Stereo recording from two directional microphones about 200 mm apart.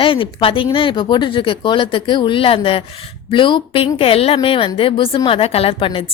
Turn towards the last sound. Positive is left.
turn(degrees=25)  # may be behind; listen again after turning